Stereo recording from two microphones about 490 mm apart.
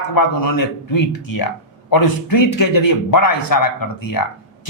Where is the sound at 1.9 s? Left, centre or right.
Left.